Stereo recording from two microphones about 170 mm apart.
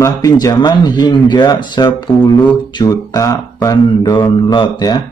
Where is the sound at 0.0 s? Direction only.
20° left (ahead or behind).